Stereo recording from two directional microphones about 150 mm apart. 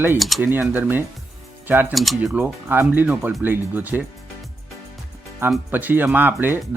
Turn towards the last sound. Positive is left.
turn(degrees=-15)  # may be behind; listen again after turning